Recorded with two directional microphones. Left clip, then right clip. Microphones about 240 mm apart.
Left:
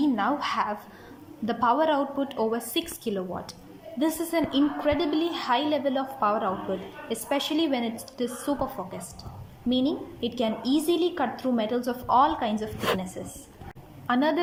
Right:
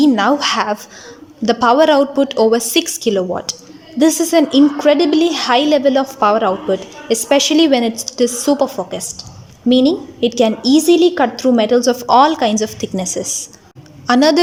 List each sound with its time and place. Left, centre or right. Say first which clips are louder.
0.0 s a woman's voice: right 13 dB; right